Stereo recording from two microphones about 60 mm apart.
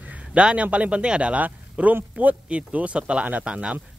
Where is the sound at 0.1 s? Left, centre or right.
Centre.